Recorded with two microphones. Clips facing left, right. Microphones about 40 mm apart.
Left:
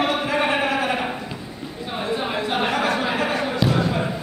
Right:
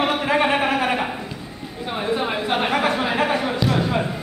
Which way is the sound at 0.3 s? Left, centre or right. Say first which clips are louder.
Right 2 dB; right.